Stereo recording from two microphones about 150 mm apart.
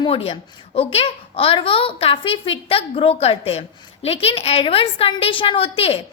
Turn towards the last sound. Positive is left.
turn(degrees=40)  # may be behind; listen again after turning